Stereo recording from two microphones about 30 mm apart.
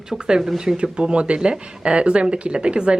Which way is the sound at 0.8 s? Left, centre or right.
Right.